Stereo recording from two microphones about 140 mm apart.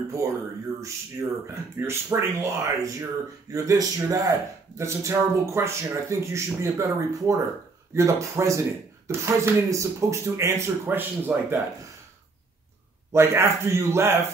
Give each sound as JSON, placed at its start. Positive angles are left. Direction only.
{"t": 0.2, "sound": "speech", "side_deg": -20}
{"t": 13.1, "sound": "speech", "side_deg": -20}